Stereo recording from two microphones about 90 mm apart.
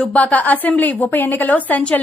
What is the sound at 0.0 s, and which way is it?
Speech, 15° left (ahead or behind).